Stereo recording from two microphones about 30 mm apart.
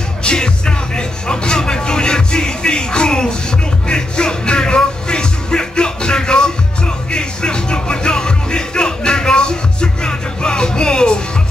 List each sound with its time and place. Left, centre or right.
0.2 s music: left